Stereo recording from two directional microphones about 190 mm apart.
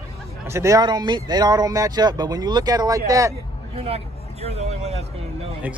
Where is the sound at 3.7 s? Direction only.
30° right (ahead or behind).